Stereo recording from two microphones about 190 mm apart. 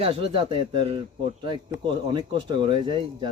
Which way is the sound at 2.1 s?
25° right (ahead or behind).